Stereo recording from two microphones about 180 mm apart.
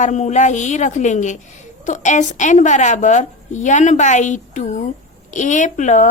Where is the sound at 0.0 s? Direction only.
40° left (ahead or behind).